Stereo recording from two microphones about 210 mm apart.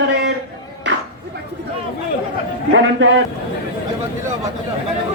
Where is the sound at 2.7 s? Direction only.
60° right (ahead or behind).